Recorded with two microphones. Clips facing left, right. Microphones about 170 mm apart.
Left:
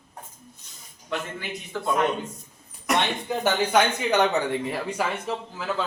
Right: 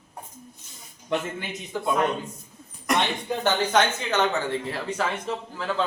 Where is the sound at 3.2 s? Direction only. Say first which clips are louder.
Even; 10° left (ahead or behind).